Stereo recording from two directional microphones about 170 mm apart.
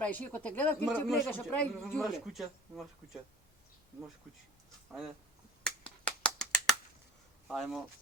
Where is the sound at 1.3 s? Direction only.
10° left (ahead or behind).